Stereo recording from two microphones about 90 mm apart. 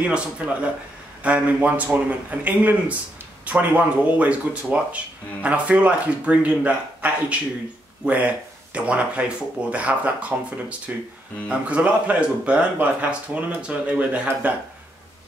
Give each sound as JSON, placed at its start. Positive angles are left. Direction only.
{"t": 0.0, "sound": "speech", "side_deg": -15}